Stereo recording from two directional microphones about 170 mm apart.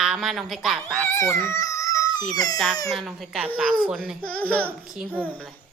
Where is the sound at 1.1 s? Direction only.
15° left (ahead or behind).